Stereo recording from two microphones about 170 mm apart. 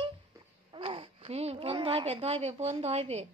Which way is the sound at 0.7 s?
35° right (ahead or behind).